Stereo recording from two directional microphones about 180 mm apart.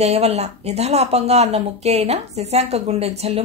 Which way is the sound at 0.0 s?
35° right (ahead or behind).